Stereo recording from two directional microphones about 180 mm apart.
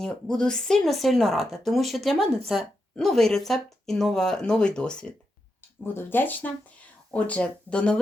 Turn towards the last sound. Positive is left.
turn(degrees=5)  # may be behind; listen again after turning